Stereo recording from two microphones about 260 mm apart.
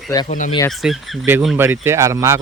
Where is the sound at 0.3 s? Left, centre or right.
Left.